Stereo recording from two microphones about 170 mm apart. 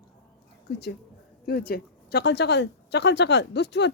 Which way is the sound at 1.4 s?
65° left (ahead or behind).